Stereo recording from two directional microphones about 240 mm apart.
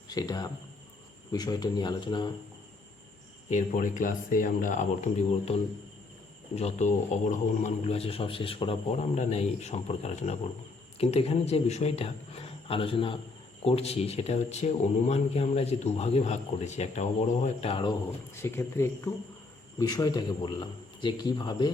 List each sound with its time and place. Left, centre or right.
0.1 s a man's voice: centre
3.5 s speech: left
6.6 s speech: left
18.4 s a man's voice: centre